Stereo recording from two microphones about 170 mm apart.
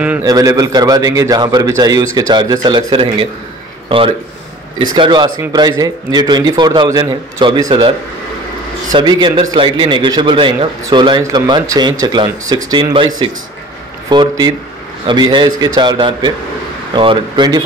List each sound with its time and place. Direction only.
0.2 s speech: 20° right (ahead or behind)
4.7 s speech: 30° right (ahead or behind)